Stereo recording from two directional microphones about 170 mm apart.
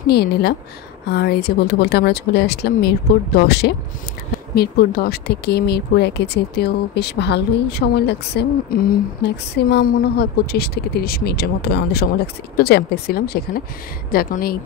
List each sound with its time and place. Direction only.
0.1 s speech: 70° left (ahead or behind)